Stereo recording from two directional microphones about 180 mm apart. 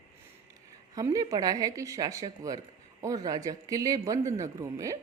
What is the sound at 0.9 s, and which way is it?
A man's voice, 20° right (ahead or behind).